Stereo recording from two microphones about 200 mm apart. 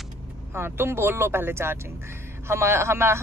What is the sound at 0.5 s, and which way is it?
Speech, 10° right (ahead or behind).